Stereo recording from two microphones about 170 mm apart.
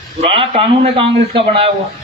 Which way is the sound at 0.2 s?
35° right (ahead or behind).